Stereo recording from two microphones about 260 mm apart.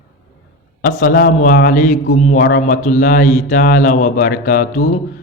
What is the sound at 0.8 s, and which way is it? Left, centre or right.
A man's voice, left.